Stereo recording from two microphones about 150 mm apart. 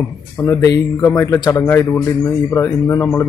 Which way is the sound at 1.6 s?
15° left (ahead or behind).